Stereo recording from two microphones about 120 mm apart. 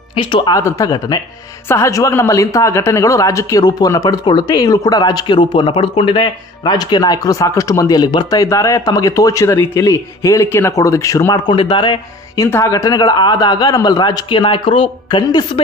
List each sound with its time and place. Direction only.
0.1 s speech: 45° left (ahead or behind)
0.6 s a man's voice: 25° left (ahead or behind)
11.4 s a man's voice: 40° left (ahead or behind)
12.4 s a man's voice: 25° left (ahead or behind); by 15.6 s 40° left (ahead or behind)